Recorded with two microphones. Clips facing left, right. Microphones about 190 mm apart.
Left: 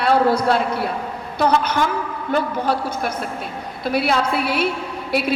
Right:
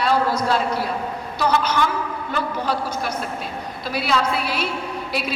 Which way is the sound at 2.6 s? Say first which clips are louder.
Left 2 dB; 55° left (ahead or behind).